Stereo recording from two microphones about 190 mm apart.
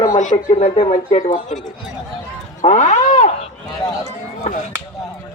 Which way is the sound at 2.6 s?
40° left (ahead or behind).